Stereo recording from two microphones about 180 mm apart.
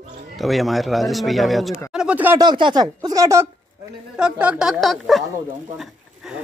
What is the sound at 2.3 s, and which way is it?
Speech, 25° right (ahead or behind).